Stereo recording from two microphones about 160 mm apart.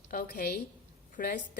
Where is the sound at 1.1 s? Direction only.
60° left (ahead or behind).